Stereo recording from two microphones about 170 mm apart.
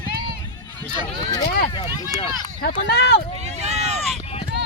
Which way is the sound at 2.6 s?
70° left (ahead or behind).